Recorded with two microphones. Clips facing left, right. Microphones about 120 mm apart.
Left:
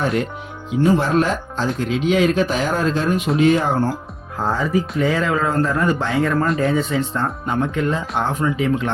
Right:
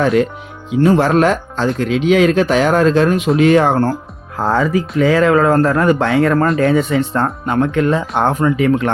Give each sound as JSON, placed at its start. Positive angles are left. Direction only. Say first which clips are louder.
{"t": 0.8, "sound": "speech", "louder": "right 5 dB", "side_deg": -90}